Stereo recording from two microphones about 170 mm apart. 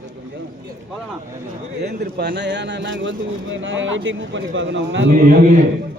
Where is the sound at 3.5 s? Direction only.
90° right.